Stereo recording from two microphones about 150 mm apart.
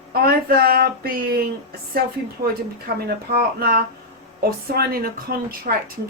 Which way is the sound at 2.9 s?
90° right.